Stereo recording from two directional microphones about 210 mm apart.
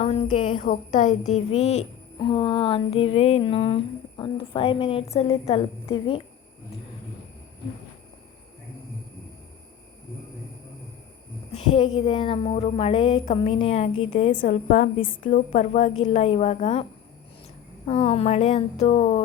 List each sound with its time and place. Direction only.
0.0 s a woman's voice: 30° left (ahead or behind)
0.7 s a woman's voice: 35° left (ahead or behind)
11.5 s a woman's voice: 30° left (ahead or behind)
17.8 s a woman's voice: 30° left (ahead or behind)